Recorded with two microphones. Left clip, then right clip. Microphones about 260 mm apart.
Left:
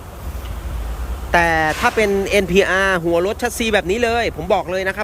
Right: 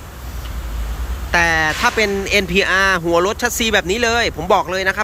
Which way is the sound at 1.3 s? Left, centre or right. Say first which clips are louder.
Even; centre.